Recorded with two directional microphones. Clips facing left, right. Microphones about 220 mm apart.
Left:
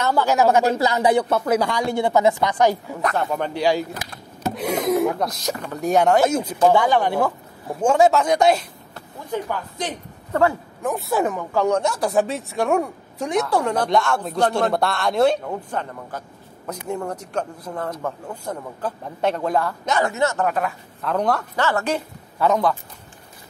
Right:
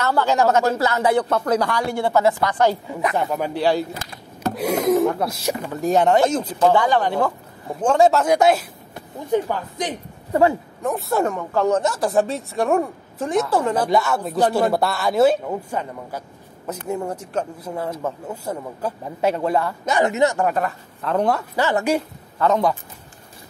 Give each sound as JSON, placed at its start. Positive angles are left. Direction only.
{"t": 0.0, "sound": "speech", "side_deg": 10}
{"t": 2.9, "sound": "speech", "side_deg": -5}
{"t": 4.6, "sound": "a sound", "side_deg": -5}
{"t": 5.2, "sound": "a man's voice", "side_deg": -10}
{"t": 5.8, "sound": "speech", "side_deg": 0}
{"t": 8.9, "sound": "speech", "side_deg": -15}
{"t": 10.8, "sound": "a man's voice", "side_deg": 0}
{"t": 20.0, "sound": "speech", "side_deg": -20}
{"t": 20.4, "sound": "a man's voice", "side_deg": 0}